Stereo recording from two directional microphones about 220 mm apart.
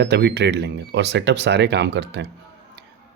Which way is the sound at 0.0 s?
50° right (ahead or behind).